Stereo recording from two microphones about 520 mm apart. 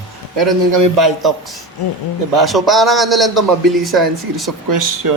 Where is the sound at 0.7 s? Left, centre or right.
Right.